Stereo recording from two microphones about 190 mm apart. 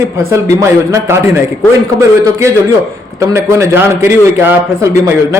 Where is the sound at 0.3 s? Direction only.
15° right (ahead or behind).